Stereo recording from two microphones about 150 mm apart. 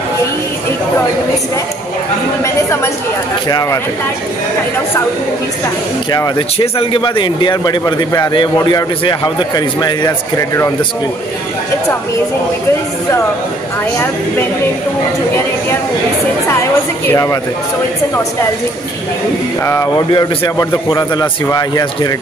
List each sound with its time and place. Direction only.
2.4 s a woman's voice: 15° left (ahead or behind)
6.6 s a man's voice: 35° left (ahead or behind); by 10.7 s 20° left (ahead or behind)
17.1 s a man's voice: 20° left (ahead or behind)
19.6 s a woman's voice: 15° left (ahead or behind)
20.1 s a man's voice: 30° left (ahead or behind)